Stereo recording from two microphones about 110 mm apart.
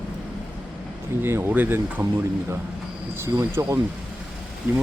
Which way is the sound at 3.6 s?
35° right (ahead or behind).